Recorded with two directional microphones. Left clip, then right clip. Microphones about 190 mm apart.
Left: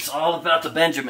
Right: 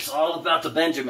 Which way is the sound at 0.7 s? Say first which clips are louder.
Left 3 dB; 65° left (ahead or behind).